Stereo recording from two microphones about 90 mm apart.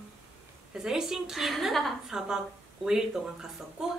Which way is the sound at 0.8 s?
5° right (ahead or behind).